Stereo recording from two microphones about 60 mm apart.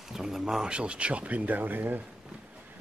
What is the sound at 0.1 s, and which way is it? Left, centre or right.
Speech, centre.